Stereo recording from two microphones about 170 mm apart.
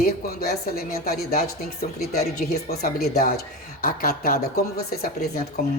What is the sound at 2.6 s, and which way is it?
Speech, 65° left (ahead or behind).